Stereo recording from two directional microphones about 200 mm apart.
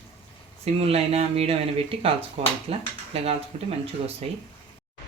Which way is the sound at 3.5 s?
30° right (ahead or behind).